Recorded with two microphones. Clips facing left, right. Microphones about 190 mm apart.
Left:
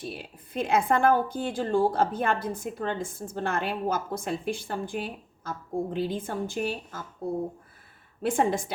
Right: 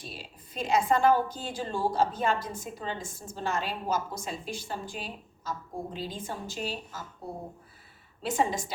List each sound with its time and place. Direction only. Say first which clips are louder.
0.0 s speech: left 7 dB; 55° left (ahead or behind)
8.2 s speech: left 4 dB; 55° left (ahead or behind)